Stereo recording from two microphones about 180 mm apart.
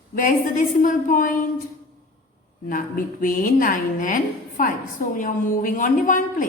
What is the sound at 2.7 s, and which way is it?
A woman's voice, 50° left (ahead or behind).